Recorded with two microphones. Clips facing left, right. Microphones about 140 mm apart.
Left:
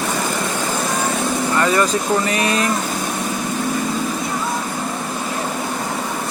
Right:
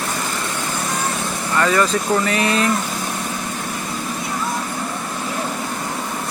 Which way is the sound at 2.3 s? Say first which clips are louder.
Even; 30° right (ahead or behind).